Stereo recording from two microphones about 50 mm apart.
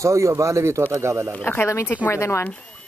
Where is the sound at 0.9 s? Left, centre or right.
Right.